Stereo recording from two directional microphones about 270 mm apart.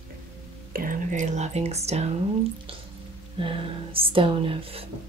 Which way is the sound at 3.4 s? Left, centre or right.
Centre.